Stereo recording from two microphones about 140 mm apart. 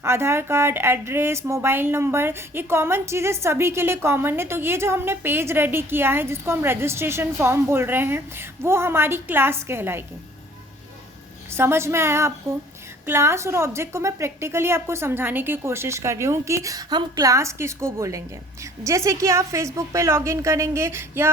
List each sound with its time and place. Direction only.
0.0 s speech: 15° right (ahead or behind)
11.5 s a woman's voice: 15° right (ahead or behind)